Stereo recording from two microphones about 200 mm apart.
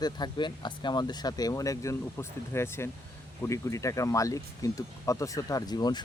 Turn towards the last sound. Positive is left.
turn(degrees=20)  # may be behind; listen again after turning